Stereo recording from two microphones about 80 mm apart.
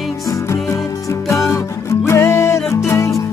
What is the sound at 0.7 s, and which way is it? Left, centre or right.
Music, left.